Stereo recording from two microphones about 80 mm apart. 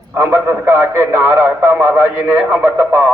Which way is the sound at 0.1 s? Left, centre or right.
Right.